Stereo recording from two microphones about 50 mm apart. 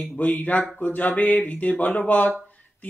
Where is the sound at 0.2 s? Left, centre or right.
Left.